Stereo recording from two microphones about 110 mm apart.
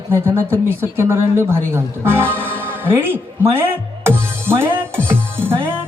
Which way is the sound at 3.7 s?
20° right (ahead or behind).